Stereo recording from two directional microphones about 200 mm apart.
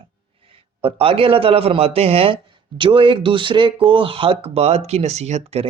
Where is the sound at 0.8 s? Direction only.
25° right (ahead or behind).